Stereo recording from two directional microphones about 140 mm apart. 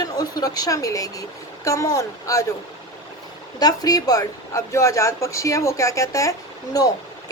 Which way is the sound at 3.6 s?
25° left (ahead or behind).